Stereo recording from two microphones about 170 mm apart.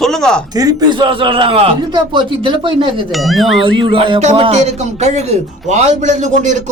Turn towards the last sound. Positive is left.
turn(degrees=-45)  # may be behind; listen again after turning